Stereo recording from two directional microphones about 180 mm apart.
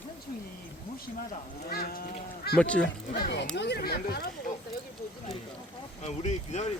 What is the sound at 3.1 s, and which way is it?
Speech, 65° left (ahead or behind).